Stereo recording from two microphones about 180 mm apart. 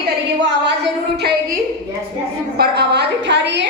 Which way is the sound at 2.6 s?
65° right (ahead or behind).